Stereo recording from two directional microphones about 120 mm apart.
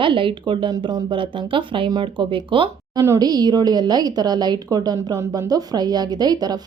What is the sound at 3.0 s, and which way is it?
Speech, 30° right (ahead or behind).